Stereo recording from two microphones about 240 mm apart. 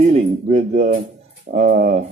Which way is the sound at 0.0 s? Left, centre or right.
Right.